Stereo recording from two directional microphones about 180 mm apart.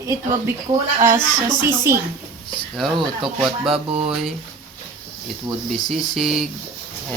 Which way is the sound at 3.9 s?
30° right (ahead or behind).